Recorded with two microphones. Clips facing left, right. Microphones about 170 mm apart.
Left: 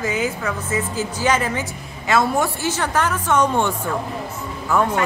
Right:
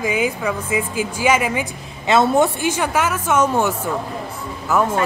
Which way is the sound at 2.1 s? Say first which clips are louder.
Right 4 dB; 20° right (ahead or behind).